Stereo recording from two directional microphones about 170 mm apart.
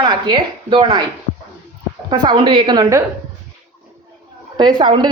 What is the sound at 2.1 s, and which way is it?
Speech, 25° right (ahead or behind).